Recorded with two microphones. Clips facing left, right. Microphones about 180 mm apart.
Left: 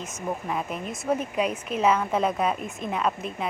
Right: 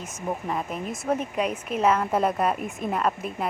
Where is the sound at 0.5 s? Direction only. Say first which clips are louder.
Right 1 dB; centre (ahead or behind).